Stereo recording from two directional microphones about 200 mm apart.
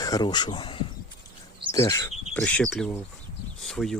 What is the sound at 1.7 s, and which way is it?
Bird, 15° left (ahead or behind).